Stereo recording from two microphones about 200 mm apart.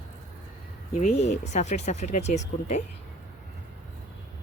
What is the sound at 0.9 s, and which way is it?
Speech, 35° left (ahead or behind).